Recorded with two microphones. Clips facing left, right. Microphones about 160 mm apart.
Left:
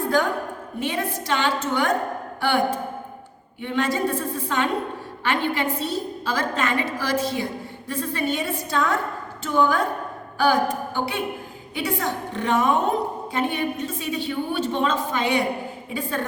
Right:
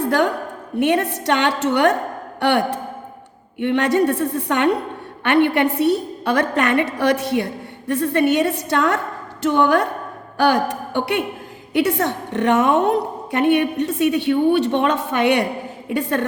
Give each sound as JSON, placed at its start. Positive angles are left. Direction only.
{"t": 0.8, "sound": "a woman's voice", "side_deg": -70}